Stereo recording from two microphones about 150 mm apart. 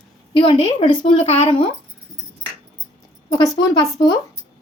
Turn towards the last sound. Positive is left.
turn(degrees=30)  # may be behind; listen again after turning